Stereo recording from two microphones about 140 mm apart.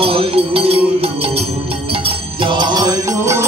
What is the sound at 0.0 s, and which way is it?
Music, 40° right (ahead or behind).